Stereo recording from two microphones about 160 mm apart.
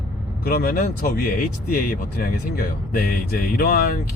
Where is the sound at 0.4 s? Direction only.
65° left (ahead or behind).